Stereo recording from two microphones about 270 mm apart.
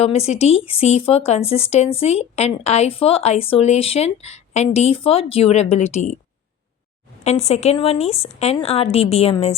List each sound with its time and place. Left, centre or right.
0.0 s speech: left
7.3 s speech: left